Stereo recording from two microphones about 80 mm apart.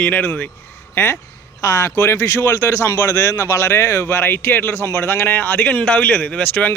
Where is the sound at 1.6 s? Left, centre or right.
Left.